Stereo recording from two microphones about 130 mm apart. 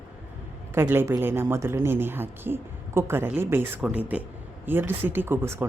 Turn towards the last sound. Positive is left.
turn(degrees=-20)  # may be behind; listen again after turning